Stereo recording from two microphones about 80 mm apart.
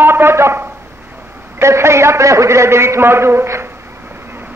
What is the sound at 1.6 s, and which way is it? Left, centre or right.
A man's voice, right.